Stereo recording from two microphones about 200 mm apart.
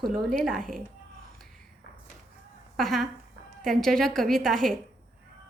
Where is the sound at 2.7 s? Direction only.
Centre (ahead or behind).